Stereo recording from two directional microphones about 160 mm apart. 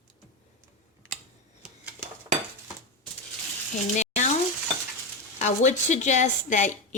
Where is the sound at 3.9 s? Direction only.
45° left (ahead or behind).